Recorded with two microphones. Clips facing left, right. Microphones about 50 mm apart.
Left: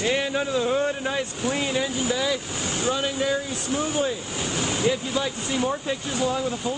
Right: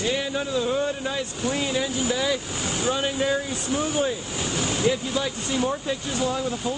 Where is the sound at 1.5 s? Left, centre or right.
Centre.